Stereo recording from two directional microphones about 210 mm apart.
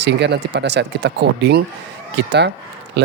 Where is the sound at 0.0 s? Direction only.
55° right (ahead or behind).